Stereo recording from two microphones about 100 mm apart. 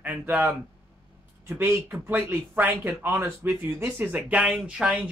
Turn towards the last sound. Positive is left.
turn(degrees=-10)  # may be behind; listen again after turning